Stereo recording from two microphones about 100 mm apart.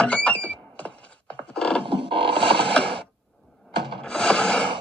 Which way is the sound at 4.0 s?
10° left (ahead or behind).